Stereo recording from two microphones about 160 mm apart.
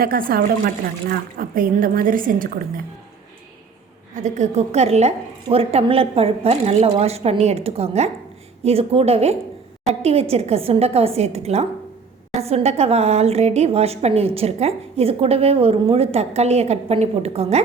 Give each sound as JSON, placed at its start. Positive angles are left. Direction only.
{"t": 0.0, "sound": "speech", "side_deg": -65}
{"t": 4.1, "sound": "a woman's voice", "side_deg": -45}